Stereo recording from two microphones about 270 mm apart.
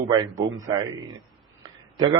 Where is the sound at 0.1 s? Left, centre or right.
Centre.